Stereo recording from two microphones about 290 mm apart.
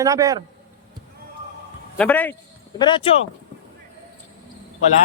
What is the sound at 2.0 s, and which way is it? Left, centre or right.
A man's voice, centre.